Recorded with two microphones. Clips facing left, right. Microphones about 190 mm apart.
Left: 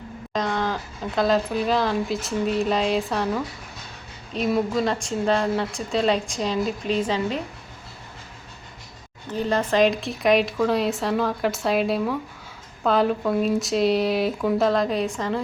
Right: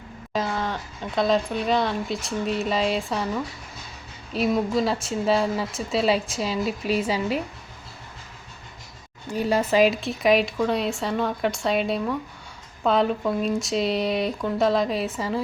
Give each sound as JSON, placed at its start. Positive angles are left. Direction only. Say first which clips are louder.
{"t": 0.3, "sound": "a woman's voice", "louder": "left 2 dB", "side_deg": -5}
{"t": 9.3, "sound": "a woman's voice", "louder": "right 1 dB", "side_deg": -10}